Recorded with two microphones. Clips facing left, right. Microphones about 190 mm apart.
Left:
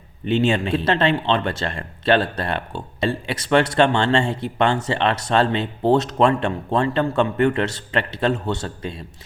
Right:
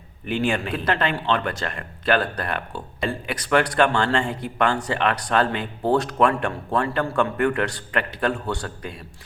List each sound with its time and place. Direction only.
0.3 s speech: 25° left (ahead or behind)